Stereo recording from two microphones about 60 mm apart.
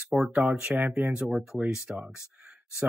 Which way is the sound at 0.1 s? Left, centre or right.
Centre.